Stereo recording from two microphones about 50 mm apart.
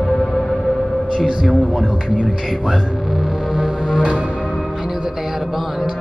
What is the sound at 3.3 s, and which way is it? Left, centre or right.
Music, centre.